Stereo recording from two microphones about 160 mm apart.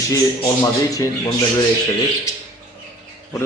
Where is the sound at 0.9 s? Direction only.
25° left (ahead or behind).